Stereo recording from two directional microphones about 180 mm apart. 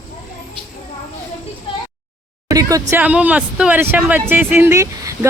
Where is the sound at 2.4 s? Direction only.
20° right (ahead or behind).